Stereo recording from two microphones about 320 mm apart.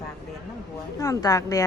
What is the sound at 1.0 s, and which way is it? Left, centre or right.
Speech, centre.